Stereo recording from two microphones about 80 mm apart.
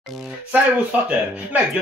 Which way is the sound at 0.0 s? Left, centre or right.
Centre.